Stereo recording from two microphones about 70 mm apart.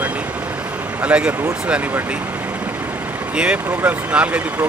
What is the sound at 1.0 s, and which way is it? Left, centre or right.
Speech, centre.